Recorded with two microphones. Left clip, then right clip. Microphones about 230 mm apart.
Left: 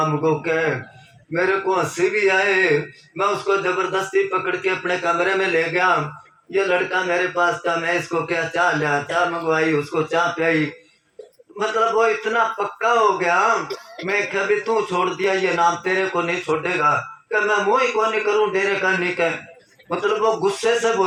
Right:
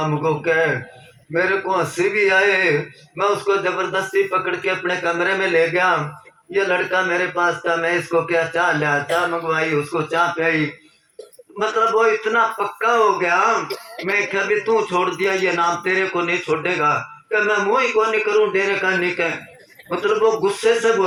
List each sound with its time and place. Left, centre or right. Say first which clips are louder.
0.0 s a man's voice: even; centre
11.6 s a man's voice: right 1 dB; centre
13.7 s speech: right 2 dB; right
14.1 s a man's voice: right 1 dB; centre